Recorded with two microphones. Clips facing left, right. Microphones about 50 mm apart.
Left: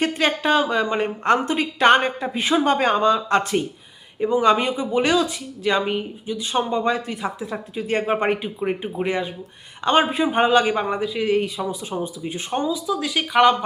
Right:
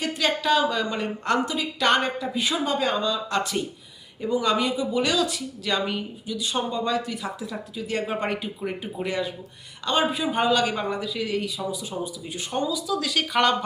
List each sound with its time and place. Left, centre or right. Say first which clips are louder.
0.0 s speech: left 4 dB; left; by 13.7 s centre